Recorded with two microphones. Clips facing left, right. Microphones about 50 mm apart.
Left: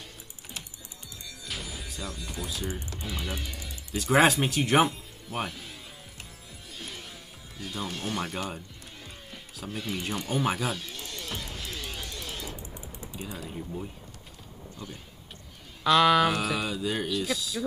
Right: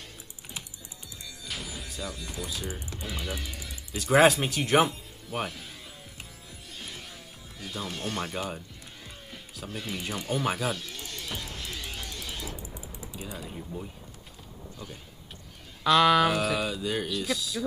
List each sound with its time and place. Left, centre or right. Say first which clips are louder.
1.4 s speech: even; centre
7.6 s speech: left 1 dB; centre
11.2 s music: even; centre
12.6 s a sound: even; centre
13.1 s typing: left 2 dB; centre
15.8 s speech: even; centre